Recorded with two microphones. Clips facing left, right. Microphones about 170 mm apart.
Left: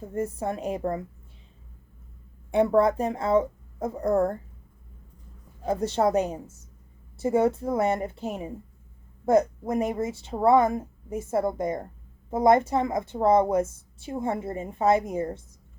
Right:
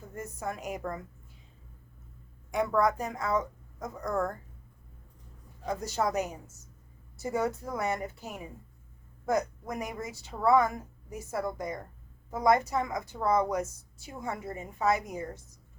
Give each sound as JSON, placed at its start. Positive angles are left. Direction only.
{"t": 0.0, "sound": "a woman's voice", "side_deg": 30}
{"t": 2.5, "sound": "a woman's voice", "side_deg": 30}
{"t": 5.6, "sound": "a woman's voice", "side_deg": 30}